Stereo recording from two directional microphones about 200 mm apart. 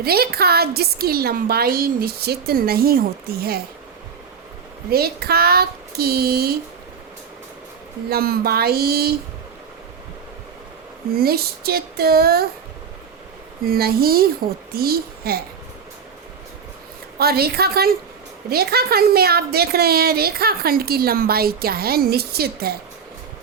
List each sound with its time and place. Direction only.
0.0 s a woman's voice: 50° right (ahead or behind)
4.9 s a woman's voice: 50° right (ahead or behind)
8.1 s a woman's voice: 50° right (ahead or behind)
11.1 s a woman's voice: 50° right (ahead or behind)
13.7 s a woman's voice: 50° right (ahead or behind)
17.2 s a woman's voice: 50° right (ahead or behind)